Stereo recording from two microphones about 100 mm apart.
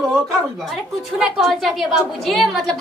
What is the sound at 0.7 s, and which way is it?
A woman's voice, 5° right (ahead or behind).